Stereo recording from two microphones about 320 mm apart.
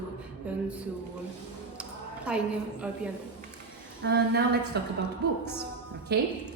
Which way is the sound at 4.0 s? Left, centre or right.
Right.